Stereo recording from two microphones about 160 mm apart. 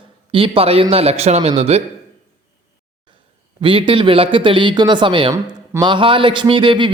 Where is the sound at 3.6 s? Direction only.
30° right (ahead or behind).